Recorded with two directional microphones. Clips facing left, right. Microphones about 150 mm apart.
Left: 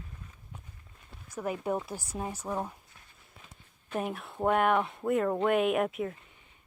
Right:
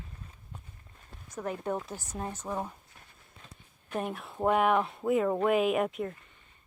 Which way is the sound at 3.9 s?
Centre (ahead or behind).